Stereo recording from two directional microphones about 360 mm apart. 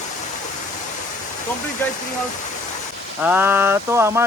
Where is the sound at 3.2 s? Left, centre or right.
Centre.